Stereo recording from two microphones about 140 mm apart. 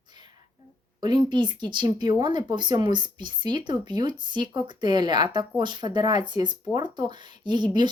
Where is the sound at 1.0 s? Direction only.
30° right (ahead or behind).